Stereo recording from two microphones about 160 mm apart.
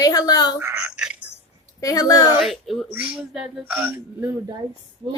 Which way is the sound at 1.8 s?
20° left (ahead or behind).